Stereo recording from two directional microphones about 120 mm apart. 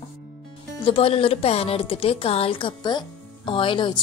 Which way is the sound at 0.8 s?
55° left (ahead or behind).